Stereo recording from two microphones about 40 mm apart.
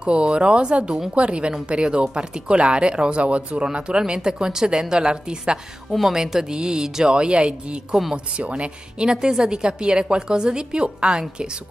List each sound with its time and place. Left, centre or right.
0.0 s speech: right
5.9 s speech: centre
6.1 s speech: centre
7.9 s speech: centre
8.4 s speech: right
9.1 s speech: centre